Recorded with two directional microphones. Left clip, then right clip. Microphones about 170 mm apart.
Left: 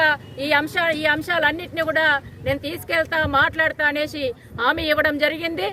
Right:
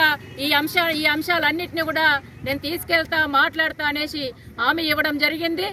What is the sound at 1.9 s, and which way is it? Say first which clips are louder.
A woman's voice: even; 45° left (ahead or behind).